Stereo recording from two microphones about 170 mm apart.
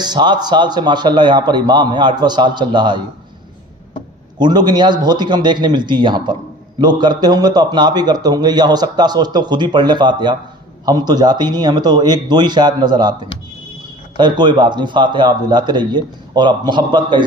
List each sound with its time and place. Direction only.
0.0 s a man's voice: 25° right (ahead or behind)
4.4 s a man's voice: 25° right (ahead or behind)